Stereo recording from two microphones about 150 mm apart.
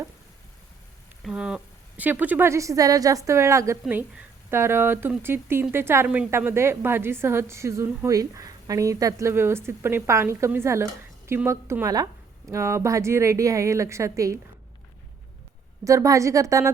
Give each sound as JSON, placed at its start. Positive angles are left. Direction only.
{"t": 1.2, "sound": "a woman's voice", "side_deg": -5}
{"t": 15.8, "sound": "a woman's voice", "side_deg": -20}